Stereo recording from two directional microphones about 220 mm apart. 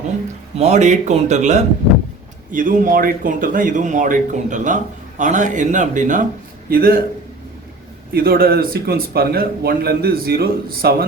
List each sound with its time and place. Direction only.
0.6 s speech: 30° right (ahead or behind)
8.1 s speech: 40° right (ahead or behind)